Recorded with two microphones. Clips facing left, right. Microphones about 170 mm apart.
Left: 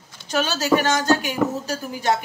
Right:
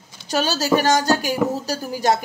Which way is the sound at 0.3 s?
35° right (ahead or behind).